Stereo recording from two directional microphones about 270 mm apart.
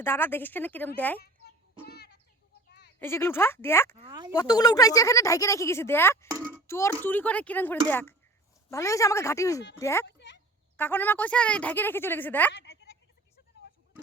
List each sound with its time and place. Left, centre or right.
0.0 s speech: centre
1.2 s child singing: left
3.0 s speech: centre
3.9 s speech: centre
4.4 s speech: centre
10.2 s a sound: left
10.8 s speech: centre
12.6 s a sound: left